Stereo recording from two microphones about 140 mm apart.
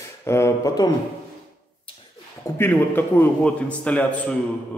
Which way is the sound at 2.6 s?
15° left (ahead or behind).